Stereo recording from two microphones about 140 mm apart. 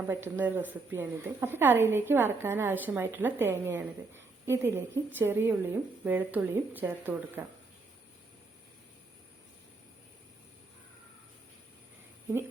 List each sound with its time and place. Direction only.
0.1 s a woman's voice: 15° right (ahead or behind)